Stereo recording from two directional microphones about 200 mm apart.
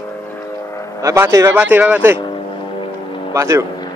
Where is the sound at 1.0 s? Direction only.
15° right (ahead or behind).